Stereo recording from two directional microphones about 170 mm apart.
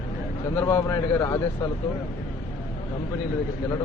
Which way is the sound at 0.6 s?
15° left (ahead or behind).